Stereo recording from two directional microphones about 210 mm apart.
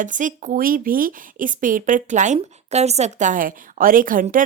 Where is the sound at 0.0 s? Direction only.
40° right (ahead or behind).